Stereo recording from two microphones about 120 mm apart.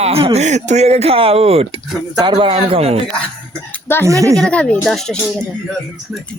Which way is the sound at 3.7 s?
20° left (ahead or behind).